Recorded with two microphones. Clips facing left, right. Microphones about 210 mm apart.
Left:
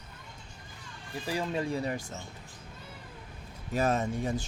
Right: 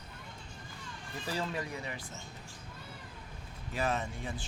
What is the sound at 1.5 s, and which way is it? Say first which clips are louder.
Speech: left 7 dB; 25° left (ahead or behind).